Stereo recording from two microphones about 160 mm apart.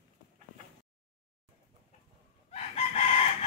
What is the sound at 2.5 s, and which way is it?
Chicken, 40° left (ahead or behind).